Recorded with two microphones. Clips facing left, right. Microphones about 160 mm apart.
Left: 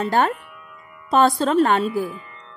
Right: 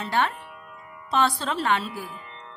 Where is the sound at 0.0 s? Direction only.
45° left (ahead or behind).